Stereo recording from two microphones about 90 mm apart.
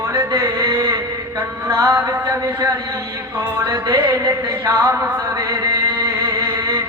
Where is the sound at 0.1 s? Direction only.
40° right (ahead or behind).